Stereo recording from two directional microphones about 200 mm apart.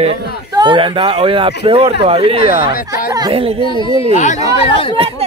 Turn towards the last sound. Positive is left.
turn(degrees=30)  # may be behind; listen again after turning